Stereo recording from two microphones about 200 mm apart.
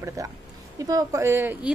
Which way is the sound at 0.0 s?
15° right (ahead or behind).